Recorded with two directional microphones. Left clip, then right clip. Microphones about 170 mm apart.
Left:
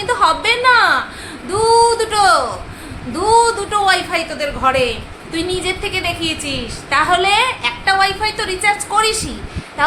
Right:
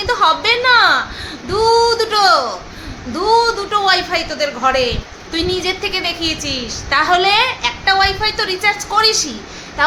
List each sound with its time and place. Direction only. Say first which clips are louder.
0.0 s a woman's voice: right 1 dB; 5° right (ahead or behind)